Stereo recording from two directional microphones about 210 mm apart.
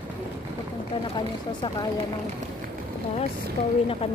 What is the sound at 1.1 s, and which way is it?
Speech, 20° left (ahead or behind).